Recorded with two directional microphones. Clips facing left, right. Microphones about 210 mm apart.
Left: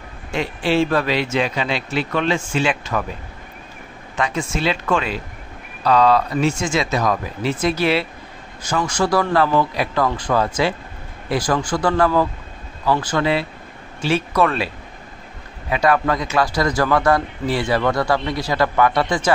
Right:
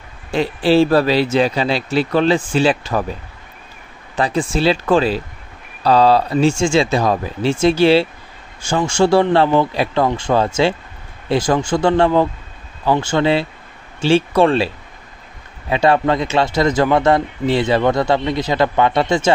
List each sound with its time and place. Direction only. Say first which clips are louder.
0.3 s speech: right 5 dB; 35° right (ahead or behind)
4.2 s a man's voice: right 5 dB; 35° right (ahead or behind)
15.7 s a man's voice: right 3 dB; 25° right (ahead or behind)